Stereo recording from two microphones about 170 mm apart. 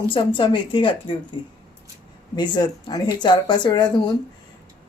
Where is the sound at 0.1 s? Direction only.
30° left (ahead or behind).